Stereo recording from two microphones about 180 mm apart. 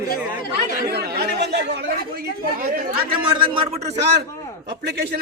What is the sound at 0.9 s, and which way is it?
Speech, 60° right (ahead or behind).